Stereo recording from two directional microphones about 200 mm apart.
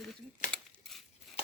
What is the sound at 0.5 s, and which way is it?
Dishes, centre (ahead or behind).